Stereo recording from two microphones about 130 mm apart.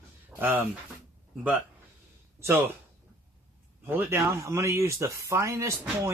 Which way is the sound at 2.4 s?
20° right (ahead or behind).